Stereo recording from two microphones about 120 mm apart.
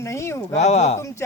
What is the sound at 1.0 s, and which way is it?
Speech, 25° left (ahead or behind).